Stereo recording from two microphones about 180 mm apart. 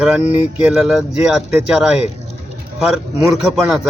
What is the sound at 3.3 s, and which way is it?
Speech, centre (ahead or behind).